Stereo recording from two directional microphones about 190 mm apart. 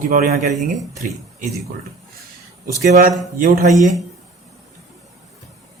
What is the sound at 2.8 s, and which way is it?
Speech, 45° right (ahead or behind).